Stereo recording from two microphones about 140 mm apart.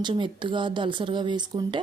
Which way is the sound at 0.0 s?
35° right (ahead or behind).